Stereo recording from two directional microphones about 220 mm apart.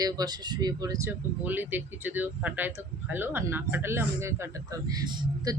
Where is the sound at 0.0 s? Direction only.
15° right (ahead or behind).